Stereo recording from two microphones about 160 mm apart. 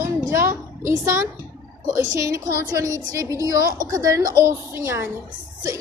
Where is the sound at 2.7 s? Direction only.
20° right (ahead or behind).